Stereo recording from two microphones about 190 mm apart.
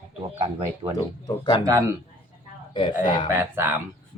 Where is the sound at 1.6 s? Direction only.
15° right (ahead or behind).